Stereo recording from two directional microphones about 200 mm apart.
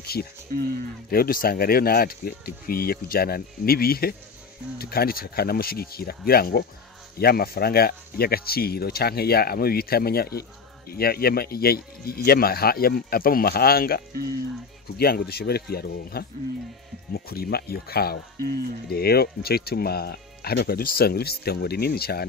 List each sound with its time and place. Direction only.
0.0 s a sound: 50° left (ahead or behind)
0.5 s speech: 45° right (ahead or behind)
1.1 s speech: 45° left (ahead or behind)